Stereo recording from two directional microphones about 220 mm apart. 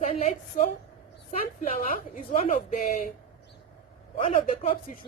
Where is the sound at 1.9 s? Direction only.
35° left (ahead or behind).